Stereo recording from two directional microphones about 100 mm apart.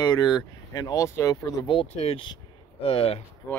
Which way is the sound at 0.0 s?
45° left (ahead or behind).